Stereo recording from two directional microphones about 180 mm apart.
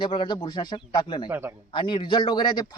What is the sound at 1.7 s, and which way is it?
Speech, 25° left (ahead or behind).